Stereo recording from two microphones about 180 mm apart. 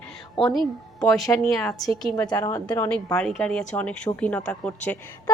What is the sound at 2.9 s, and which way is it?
A woman's voice, 5° left (ahead or behind).